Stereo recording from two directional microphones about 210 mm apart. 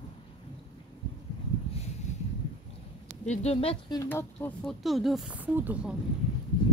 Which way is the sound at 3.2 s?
30° left (ahead or behind).